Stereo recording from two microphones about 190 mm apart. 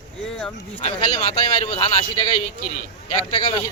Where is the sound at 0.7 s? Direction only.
30° left (ahead or behind).